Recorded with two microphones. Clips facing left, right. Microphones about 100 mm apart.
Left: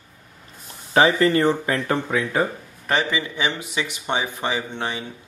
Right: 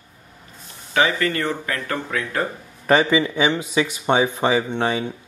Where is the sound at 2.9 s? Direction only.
15° right (ahead or behind).